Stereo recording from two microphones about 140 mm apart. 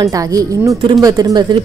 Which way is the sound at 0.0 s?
25° right (ahead or behind).